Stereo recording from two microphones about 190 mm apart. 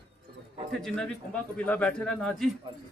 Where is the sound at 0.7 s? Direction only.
5° left (ahead or behind).